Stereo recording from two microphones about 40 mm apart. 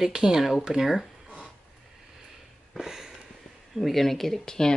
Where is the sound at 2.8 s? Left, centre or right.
Centre.